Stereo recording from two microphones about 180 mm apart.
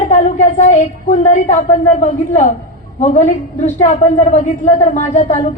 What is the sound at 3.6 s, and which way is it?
A woman's voice, 45° left (ahead or behind).